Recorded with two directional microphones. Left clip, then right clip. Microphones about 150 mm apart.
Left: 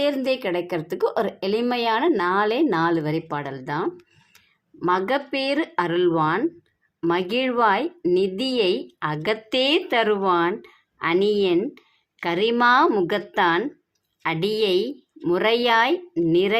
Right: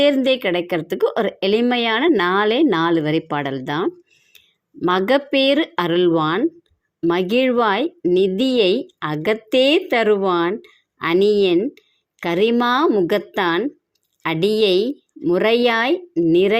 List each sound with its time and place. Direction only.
0.0 s a woman's voice: 30° right (ahead or behind)